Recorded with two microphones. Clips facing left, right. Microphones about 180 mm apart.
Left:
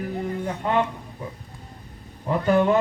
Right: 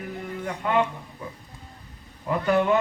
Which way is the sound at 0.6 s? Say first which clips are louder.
Left 1 dB; 30° left (ahead or behind).